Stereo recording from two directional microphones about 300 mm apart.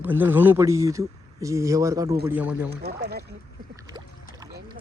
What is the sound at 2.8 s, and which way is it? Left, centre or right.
Speech, right.